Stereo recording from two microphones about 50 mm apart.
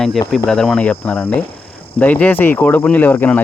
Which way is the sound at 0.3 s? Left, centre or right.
Centre.